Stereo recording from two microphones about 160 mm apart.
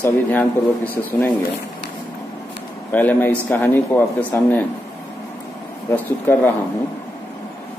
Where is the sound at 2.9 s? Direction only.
10° left (ahead or behind).